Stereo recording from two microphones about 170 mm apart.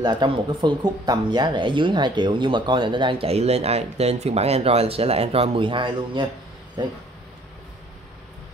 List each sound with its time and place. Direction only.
0.0 s speech: 25° right (ahead or behind)